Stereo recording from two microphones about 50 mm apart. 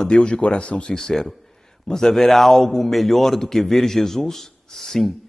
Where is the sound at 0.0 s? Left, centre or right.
Centre.